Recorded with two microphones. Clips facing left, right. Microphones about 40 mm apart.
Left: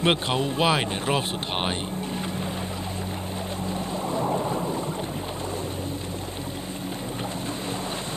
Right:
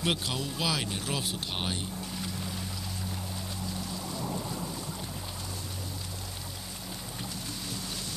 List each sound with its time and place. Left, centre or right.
0.0 s speech: left
3.6 s thunder: left